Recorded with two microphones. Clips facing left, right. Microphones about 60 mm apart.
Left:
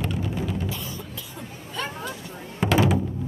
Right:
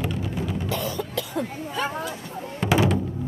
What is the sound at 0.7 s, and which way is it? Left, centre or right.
Cough, right.